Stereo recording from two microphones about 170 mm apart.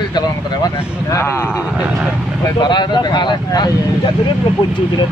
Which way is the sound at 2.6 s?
25° left (ahead or behind).